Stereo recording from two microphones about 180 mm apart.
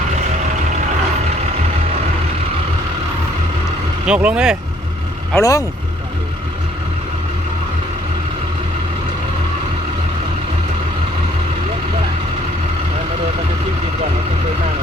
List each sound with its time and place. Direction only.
4.0 s speech: 5° right (ahead or behind)
5.4 s speech: 20° left (ahead or behind)